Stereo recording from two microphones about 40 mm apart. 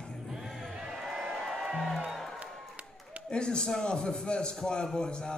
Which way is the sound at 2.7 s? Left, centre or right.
Right.